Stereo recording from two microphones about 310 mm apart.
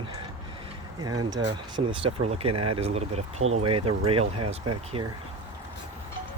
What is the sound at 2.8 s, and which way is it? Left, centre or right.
Speech, centre.